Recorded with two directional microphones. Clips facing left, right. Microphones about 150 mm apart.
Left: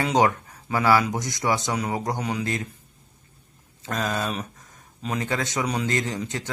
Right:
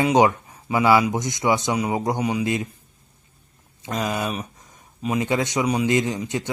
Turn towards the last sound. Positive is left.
turn(degrees=-20)  # may be behind; listen again after turning